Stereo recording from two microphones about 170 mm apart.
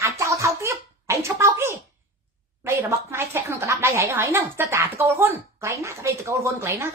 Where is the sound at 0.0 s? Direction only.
15° right (ahead or behind).